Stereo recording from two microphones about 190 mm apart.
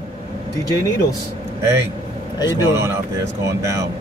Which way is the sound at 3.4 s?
15° right (ahead or behind).